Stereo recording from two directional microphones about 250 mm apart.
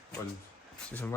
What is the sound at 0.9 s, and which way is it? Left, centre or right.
Speech, centre.